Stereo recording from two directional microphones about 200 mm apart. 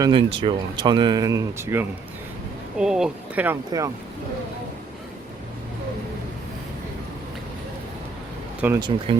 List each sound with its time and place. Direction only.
0.0 s speech: 25° right (ahead or behind)
8.6 s speech: 15° right (ahead or behind)